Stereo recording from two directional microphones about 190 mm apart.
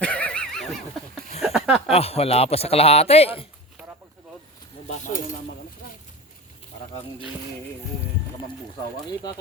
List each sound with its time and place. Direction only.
0.0 s a sound: 5° left (ahead or behind)
1.9 s a man's voice: 35° left (ahead or behind)
4.9 s cutlery: 40° left (ahead or behind)